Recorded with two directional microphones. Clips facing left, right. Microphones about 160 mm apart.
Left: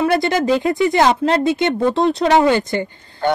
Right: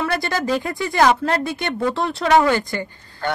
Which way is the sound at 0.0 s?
20° left (ahead or behind).